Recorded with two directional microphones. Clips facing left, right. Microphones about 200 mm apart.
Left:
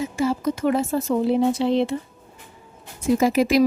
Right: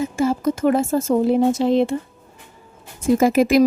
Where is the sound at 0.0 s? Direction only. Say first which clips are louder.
Right 3 dB; 50° right (ahead or behind).